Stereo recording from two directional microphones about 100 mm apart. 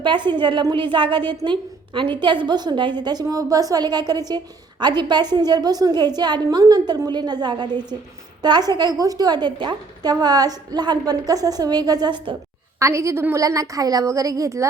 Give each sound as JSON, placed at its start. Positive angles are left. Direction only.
{"t": 0.0, "sound": "a woman's voice", "side_deg": -50}
{"t": 12.8, "sound": "a woman's voice", "side_deg": -30}